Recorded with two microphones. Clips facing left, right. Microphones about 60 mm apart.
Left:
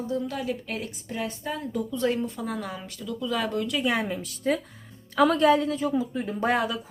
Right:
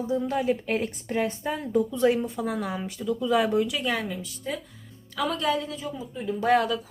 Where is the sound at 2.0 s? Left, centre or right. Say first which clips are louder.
Right 3 dB; centre.